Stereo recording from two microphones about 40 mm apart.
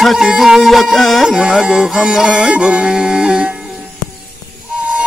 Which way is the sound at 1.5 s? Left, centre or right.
Centre.